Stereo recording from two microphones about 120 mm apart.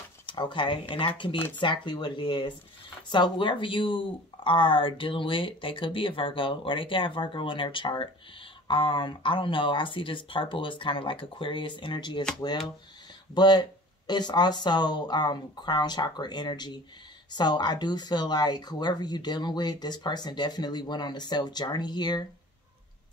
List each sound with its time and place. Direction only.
0.3 s speech: 45° left (ahead or behind)
13.3 s speech: 35° left (ahead or behind)